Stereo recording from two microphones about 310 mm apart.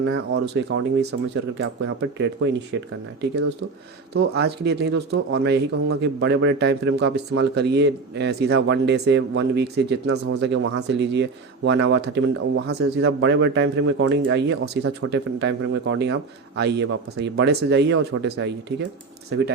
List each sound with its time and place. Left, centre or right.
0.0 s speech: right
4.1 s speech: right